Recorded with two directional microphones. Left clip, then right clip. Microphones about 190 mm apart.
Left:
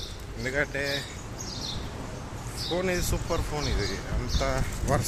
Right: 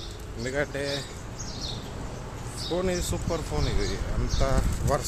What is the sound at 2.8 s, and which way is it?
Speech, 10° right (ahead or behind).